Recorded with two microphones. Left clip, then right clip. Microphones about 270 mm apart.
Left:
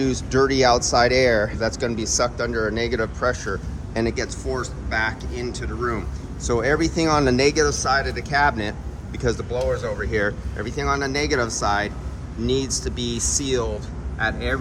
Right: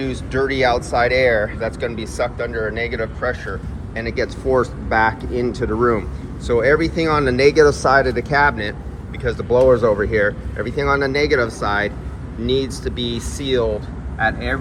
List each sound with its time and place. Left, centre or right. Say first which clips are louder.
0.0 s speech: left 1 dB; centre
9.6 s speech: right 11 dB; centre
10.1 s speech: right 5 dB; centre